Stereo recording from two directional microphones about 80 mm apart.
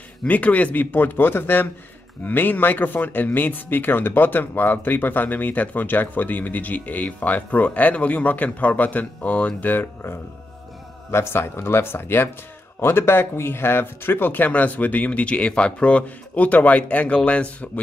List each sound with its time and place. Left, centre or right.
0.2 s speech: centre